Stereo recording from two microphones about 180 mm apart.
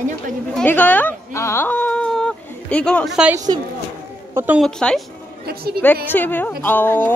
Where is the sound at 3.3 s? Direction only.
20° right (ahead or behind).